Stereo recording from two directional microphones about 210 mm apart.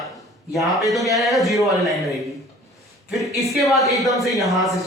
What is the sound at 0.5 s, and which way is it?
Speech, centre (ahead or behind).